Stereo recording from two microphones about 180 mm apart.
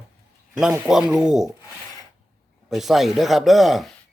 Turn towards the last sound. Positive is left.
turn(degrees=0)  # may be behind; listen again after turning